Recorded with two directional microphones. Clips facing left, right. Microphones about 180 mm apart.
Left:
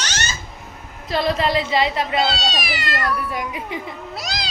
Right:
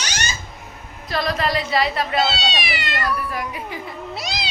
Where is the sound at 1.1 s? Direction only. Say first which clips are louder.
Left 2 dB; 25° left (ahead or behind).